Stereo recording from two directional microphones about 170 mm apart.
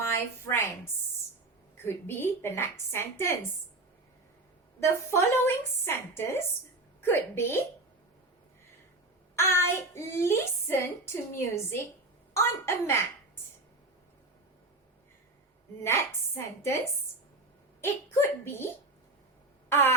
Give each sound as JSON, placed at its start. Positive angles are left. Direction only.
{"t": 0.0, "sound": "a woman's voice", "side_deg": 15}
{"t": 4.8, "sound": "a woman's voice", "side_deg": 15}
{"t": 9.3, "sound": "a woman's voice", "side_deg": 15}
{"t": 15.8, "sound": "a woman's voice", "side_deg": 15}
{"t": 17.7, "sound": "a woman's voice", "side_deg": 15}